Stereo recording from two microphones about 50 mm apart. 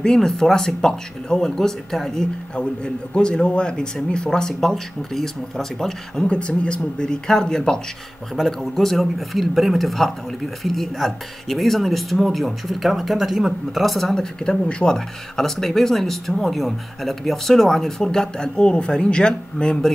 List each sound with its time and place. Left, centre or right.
0.0 s speech: centre
6.2 s speech: left; by 13.9 s centre
13.9 s speech: centre
14.4 s speech: centre